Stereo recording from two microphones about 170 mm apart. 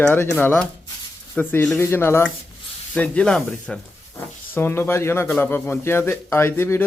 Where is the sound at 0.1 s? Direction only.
10° left (ahead or behind).